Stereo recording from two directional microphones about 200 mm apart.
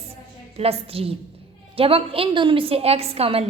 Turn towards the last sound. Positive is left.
turn(degrees=-30)  # may be behind; listen again after turning